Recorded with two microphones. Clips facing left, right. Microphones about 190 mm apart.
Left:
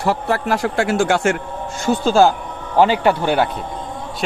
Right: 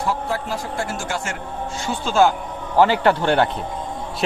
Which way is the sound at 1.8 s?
40° left (ahead or behind).